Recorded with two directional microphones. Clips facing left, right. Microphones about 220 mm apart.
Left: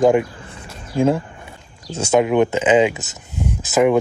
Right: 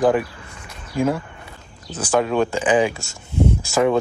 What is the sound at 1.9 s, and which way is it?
Speech, 25° left (ahead or behind).